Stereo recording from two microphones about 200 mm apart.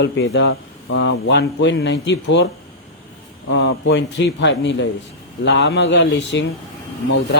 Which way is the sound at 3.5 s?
65° left (ahead or behind).